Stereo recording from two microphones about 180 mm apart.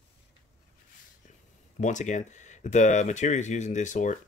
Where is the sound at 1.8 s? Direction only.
40° left (ahead or behind).